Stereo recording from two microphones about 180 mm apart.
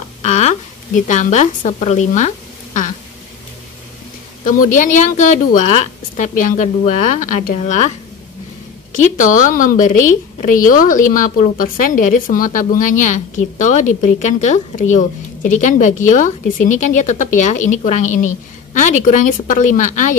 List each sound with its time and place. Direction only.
0.2 s a sound: 40° left (ahead or behind)
4.5 s a woman's voice: 45° left (ahead or behind)
8.9 s a woman's voice: 45° left (ahead or behind)